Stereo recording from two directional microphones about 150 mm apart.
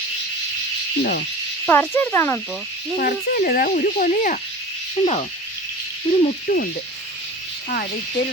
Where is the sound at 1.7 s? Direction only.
15° left (ahead or behind).